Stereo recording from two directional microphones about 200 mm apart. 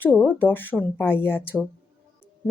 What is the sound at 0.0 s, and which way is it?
A woman's voice, 10° left (ahead or behind).